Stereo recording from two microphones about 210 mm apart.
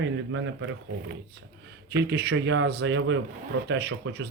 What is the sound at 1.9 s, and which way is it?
Speech, 50° right (ahead or behind).